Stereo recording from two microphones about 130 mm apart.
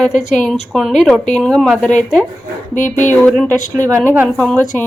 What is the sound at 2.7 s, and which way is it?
Speech, 80° left.